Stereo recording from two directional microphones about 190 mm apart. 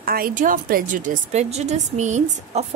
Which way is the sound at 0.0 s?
50° right (ahead or behind).